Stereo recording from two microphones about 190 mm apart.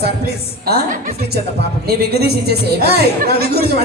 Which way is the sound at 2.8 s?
55° right (ahead or behind).